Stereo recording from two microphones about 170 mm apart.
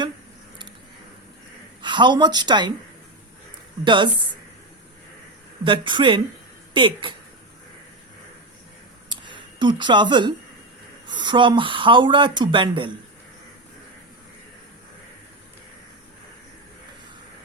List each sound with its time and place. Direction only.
1.8 s a woman's voice: 25° right (ahead or behind)
3.8 s speech: 30° right (ahead or behind)
5.6 s speech: 30° right (ahead or behind)
9.0 s a sound: 30° right (ahead or behind)
11.0 s speech: 25° right (ahead or behind)